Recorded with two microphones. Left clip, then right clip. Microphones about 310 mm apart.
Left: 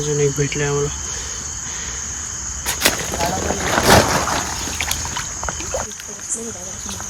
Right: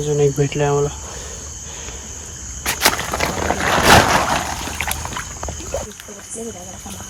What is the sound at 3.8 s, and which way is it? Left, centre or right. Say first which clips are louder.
Boat: right 2 dB; right.